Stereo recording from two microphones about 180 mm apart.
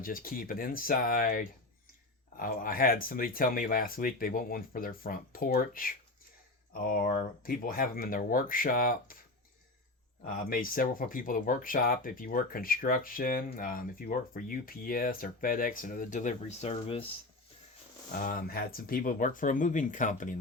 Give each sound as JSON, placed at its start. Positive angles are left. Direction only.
{"t": 0.0, "sound": "speech", "side_deg": 50}
{"t": 10.2, "sound": "speech", "side_deg": 50}
{"t": 18.1, "sound": "speech", "side_deg": 45}